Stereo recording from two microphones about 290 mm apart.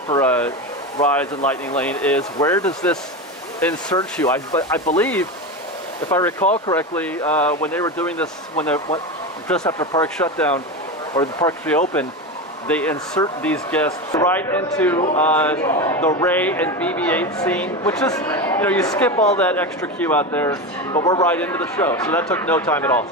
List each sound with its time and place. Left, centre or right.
0.1 s speech: centre
6.4 s speech: left
6.7 s speech: centre
9.5 s speech: centre